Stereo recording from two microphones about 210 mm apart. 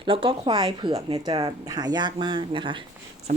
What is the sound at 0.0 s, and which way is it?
Speech, 25° right (ahead or behind).